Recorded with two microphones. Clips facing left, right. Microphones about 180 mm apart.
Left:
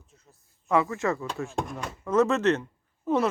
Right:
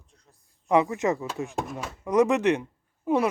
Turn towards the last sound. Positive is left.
turn(degrees=-10)  # may be behind; listen again after turning